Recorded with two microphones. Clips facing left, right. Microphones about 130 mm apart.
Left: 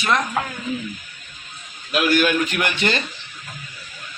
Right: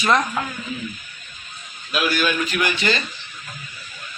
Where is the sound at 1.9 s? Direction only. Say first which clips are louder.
Left 4 dB; 60° left (ahead or behind).